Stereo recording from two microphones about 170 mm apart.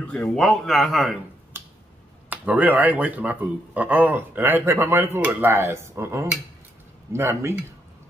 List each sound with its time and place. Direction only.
0.4 s speech: centre (ahead or behind)
2.2 s speech: 10° right (ahead or behind)